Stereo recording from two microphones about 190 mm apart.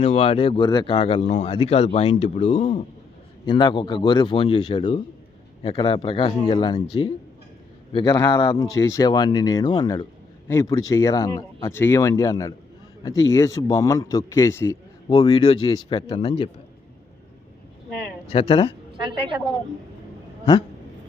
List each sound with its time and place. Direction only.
0.0 s speech: 30° left (ahead or behind)
3.4 s a man's voice: 25° left (ahead or behind)
18.3 s a man's voice: 30° left (ahead or behind)
18.9 s a woman's voice: 25° right (ahead or behind)
20.4 s speech: 30° left (ahead or behind)